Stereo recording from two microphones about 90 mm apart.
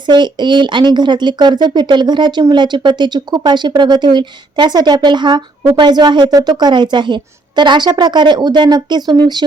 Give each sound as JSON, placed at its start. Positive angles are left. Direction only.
{"t": 0.1, "sound": "speech", "side_deg": -55}